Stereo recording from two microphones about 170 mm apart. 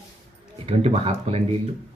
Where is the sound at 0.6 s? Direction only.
40° right (ahead or behind).